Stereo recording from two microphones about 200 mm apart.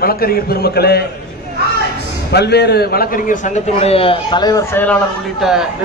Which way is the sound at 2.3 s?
55° left (ahead or behind).